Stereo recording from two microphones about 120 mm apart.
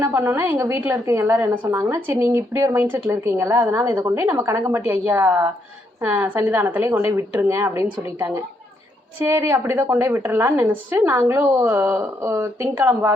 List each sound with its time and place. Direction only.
0.0 s a woman's voice: 25° right (ahead or behind)